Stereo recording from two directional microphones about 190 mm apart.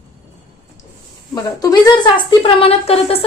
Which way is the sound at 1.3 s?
20° left (ahead or behind).